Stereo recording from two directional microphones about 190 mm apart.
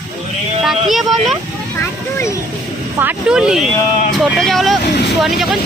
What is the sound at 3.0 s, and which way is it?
Speech, 5° right (ahead or behind).